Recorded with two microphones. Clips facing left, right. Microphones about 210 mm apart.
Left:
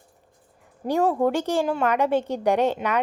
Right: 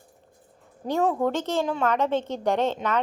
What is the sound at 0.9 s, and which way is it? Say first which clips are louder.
A woman's voice: left 2 dB; 15° left (ahead or behind).